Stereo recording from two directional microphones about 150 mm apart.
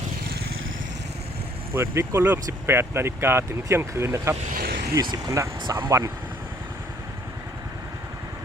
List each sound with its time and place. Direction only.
1.7 s speech: 15° right (ahead or behind)
4.5 s vehicle: 90° right
5.1 s speech: 20° right (ahead or behind)